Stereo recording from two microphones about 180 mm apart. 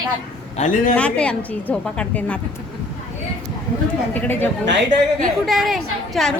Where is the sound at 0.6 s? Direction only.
45° left (ahead or behind).